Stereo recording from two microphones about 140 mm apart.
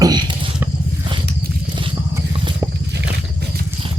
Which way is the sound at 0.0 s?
30° right (ahead or behind).